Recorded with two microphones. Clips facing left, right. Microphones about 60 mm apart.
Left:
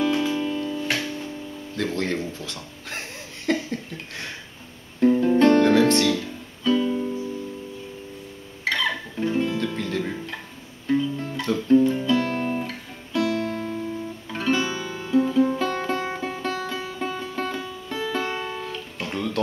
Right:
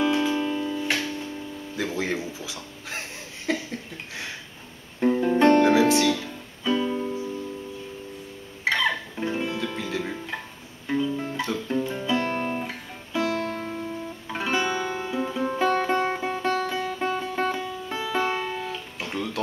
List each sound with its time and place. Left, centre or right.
0.0 s music: centre
1.8 s speech: centre
5.0 s music: centre
8.6 s music: centre
10.9 s guitar: centre
14.9 s music: right; by 19.3 s centre